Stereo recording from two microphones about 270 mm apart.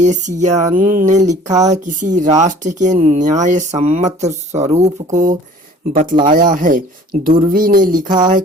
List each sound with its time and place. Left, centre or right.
0.0 s speech: right